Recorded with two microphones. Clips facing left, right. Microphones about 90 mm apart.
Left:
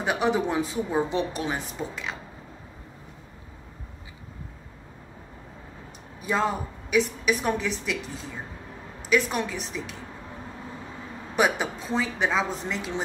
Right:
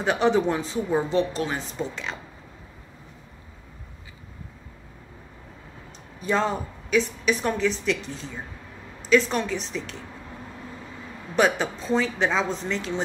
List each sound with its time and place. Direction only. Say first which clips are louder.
0.0 s a woman's voice: right 3 dB; 10° left (ahead or behind)
6.2 s a woman's voice: right 1 dB; 5° left (ahead or behind)
11.3 s a woman's voice: right 2 dB; 10° left (ahead or behind)